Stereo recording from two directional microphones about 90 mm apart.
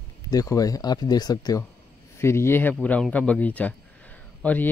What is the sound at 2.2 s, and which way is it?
Speech, 30° left (ahead or behind).